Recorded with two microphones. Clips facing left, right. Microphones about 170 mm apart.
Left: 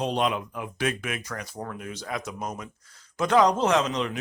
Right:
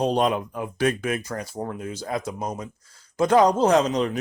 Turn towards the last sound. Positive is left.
turn(degrees=-35)  # may be behind; listen again after turning